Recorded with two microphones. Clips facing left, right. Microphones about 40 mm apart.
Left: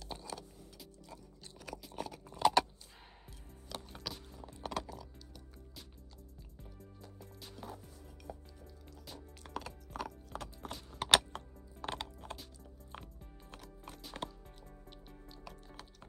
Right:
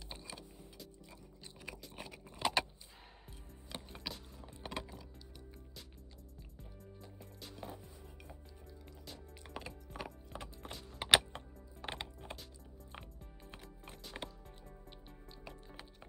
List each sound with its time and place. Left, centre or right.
0.1 s music: centre
1.6 s a sound: centre
3.7 s music: right
4.1 s music: centre
7.0 s music: centre
9.5 s music: centre
13.5 s music: centre
15.4 s music: right